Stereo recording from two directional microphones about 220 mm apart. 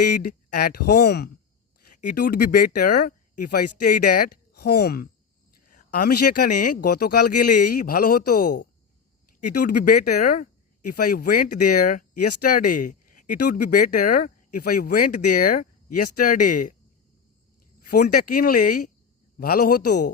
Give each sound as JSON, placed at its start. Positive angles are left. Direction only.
{"t": 0.2, "sound": "speech", "side_deg": 45}
{"t": 16.2, "sound": "speech", "side_deg": 40}
{"t": 17.7, "sound": "speech", "side_deg": 40}